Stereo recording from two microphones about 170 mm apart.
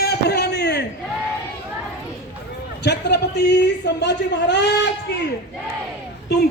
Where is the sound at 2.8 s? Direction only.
75° left (ahead or behind).